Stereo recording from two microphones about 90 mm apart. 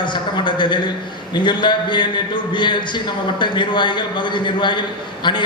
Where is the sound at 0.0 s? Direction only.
60° left (ahead or behind).